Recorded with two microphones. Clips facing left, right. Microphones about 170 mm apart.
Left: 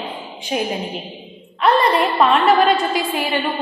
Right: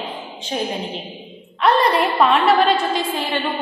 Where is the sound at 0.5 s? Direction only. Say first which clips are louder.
Left 2 dB; 10° left (ahead or behind).